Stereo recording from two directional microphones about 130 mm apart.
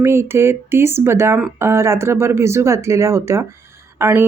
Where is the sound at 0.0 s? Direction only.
20° right (ahead or behind).